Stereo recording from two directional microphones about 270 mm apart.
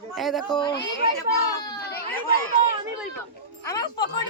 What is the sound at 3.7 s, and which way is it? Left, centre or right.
Speech, centre.